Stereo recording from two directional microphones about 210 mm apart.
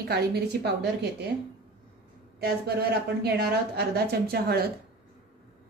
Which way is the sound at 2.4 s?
50° right (ahead or behind).